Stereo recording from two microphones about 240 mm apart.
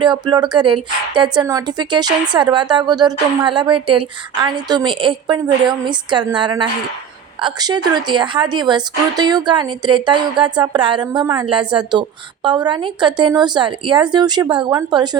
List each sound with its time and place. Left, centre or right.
0.0 s a woman's voice: centre